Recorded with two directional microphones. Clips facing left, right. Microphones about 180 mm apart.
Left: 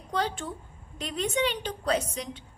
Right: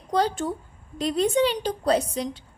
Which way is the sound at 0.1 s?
40° right (ahead or behind).